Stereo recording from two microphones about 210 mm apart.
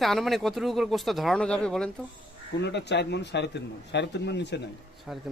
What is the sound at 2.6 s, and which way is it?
Speech, 55° left (ahead or behind).